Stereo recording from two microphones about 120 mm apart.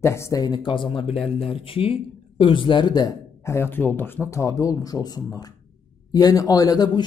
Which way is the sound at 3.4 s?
20° left (ahead or behind).